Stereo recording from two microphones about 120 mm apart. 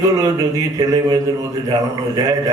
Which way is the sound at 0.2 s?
30° right (ahead or behind).